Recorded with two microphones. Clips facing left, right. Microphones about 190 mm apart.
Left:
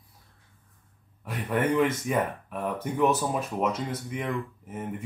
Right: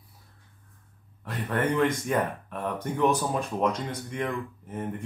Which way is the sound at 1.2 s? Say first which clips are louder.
Left 1 dB; 10° left (ahead or behind).